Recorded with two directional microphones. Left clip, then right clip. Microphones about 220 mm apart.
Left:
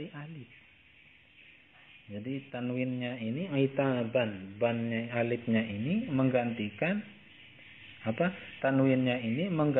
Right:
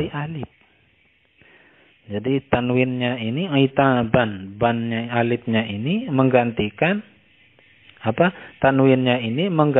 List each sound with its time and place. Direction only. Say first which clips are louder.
0.0 s a sound: right 17 dB; 50° right (ahead or behind)
2.1 s speech: right 18 dB; 50° right (ahead or behind)
8.0 s speech: right 13 dB; 50° right (ahead or behind)